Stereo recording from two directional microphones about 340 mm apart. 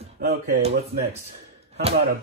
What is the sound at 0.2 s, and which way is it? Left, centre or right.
Speech, right.